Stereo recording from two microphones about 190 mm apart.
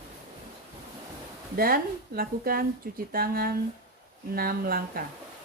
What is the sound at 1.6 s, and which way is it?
Speech, 50° right (ahead or behind).